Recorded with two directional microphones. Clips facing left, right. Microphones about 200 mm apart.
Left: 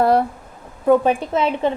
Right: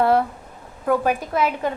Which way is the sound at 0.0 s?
40° left (ahead or behind).